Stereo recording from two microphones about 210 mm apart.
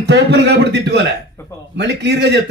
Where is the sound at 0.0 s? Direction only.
55° right (ahead or behind).